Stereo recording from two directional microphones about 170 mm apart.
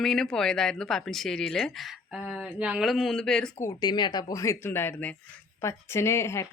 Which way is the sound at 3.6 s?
20° left (ahead or behind).